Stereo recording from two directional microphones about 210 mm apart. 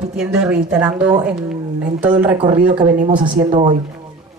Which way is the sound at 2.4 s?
35° right (ahead or behind).